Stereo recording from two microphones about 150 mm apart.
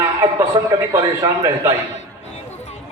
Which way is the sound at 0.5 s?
30° right (ahead or behind).